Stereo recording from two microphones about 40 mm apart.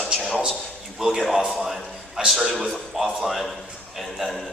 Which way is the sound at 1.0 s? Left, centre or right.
Centre.